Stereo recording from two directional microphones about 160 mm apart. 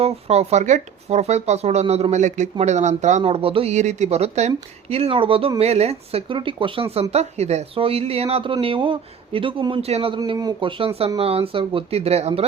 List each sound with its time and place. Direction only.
0.0 s speech: 40° right (ahead or behind)
10.2 s speech: 25° right (ahead or behind); by 12.5 s 40° right (ahead or behind)